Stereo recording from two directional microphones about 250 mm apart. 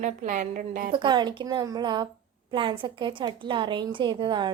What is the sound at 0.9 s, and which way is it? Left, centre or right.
A woman's voice, centre.